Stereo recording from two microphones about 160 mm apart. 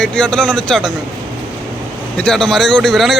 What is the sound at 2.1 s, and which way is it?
Speech, 5° left (ahead or behind).